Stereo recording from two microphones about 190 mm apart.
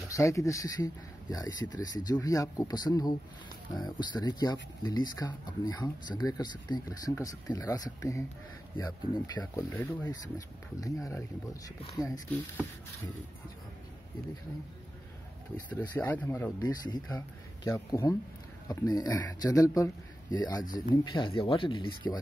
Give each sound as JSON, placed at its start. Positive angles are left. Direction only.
{"t": 0.1, "sound": "speech", "side_deg": 15}
{"t": 15.9, "sound": "speech", "side_deg": 10}
{"t": 16.6, "sound": "speech", "side_deg": 20}
{"t": 20.6, "sound": "speech", "side_deg": 45}
{"t": 20.9, "sound": "speech", "side_deg": 25}